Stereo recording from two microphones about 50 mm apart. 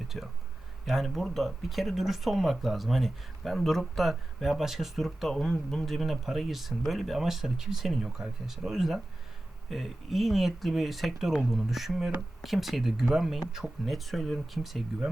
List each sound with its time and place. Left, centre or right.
0.1 s speech: centre